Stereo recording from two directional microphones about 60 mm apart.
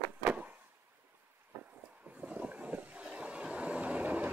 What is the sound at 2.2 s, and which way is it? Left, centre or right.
Vehicle, right.